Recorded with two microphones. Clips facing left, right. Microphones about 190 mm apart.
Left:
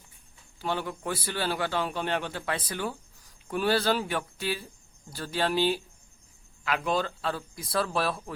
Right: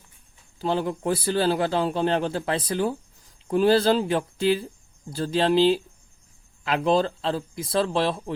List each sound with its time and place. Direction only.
0.6 s a man's voice: 30° right (ahead or behind)